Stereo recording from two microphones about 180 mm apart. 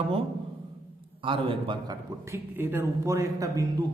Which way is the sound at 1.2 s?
30° right (ahead or behind).